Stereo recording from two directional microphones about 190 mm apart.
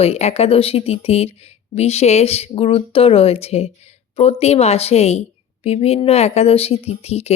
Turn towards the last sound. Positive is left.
turn(degrees=35)  # may be behind; listen again after turning